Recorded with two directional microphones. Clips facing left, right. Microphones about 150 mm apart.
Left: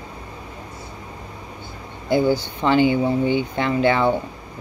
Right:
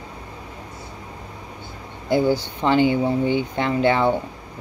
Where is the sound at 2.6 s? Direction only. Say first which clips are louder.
Left 1 dB; 35° right (ahead or behind).